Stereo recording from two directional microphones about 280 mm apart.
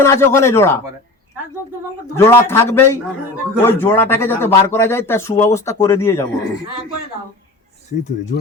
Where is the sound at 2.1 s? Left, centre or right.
Centre.